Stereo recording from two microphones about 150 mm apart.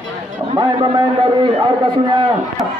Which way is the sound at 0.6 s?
30° right (ahead or behind).